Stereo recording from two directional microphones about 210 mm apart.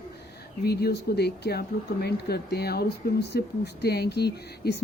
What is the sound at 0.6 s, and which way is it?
Speech, 50° left (ahead or behind).